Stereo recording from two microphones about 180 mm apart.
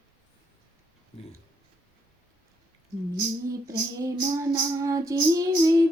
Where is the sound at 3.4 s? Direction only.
20° right (ahead or behind).